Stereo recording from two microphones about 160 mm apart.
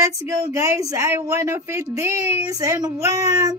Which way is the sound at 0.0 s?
20° right (ahead or behind).